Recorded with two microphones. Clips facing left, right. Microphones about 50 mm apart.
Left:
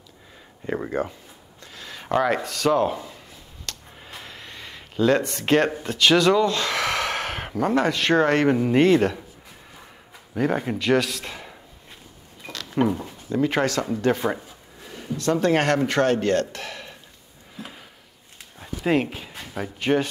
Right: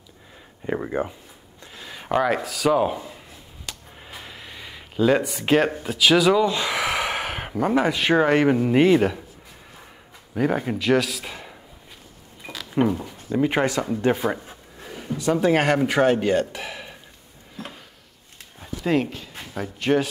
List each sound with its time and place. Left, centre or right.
0.7 s speech: centre
10.3 s a man's voice: centre
12.4 s a sound: centre
13.3 s speech: centre
14.1 s speech: centre
17.6 s drawer open or close: centre
18.6 s a sound: centre
19.0 s speech: centre
19.5 s speech: centre